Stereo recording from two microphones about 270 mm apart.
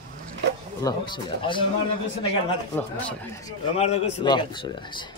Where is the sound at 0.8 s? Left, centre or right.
Centre.